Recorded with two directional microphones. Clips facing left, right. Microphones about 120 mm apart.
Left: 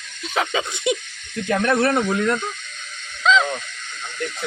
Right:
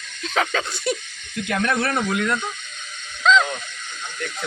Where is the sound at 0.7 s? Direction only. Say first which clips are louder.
Left 3 dB; 20° left (ahead or behind).